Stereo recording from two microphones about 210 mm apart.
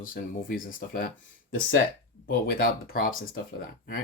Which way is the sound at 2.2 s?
45° left (ahead or behind).